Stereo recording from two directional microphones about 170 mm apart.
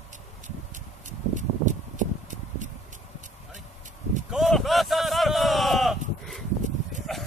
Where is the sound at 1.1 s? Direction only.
45° right (ahead or behind).